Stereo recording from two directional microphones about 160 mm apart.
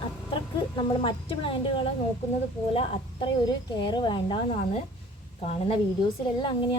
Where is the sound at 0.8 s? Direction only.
30° left (ahead or behind).